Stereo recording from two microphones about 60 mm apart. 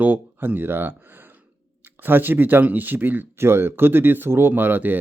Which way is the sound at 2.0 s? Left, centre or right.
Right.